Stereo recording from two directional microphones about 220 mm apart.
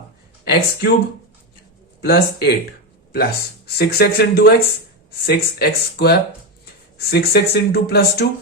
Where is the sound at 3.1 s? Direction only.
45° left (ahead or behind).